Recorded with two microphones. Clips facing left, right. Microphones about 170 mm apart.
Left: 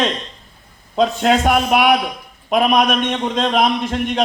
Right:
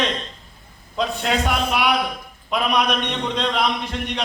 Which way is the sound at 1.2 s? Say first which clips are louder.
Left 6 dB; 50° left (ahead or behind).